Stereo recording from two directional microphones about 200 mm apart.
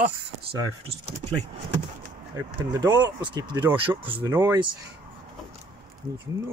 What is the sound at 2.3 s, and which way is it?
Speech, 20° right (ahead or behind).